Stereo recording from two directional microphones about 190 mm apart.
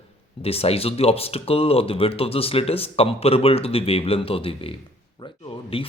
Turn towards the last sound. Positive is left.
turn(degrees=30)  # may be behind; listen again after turning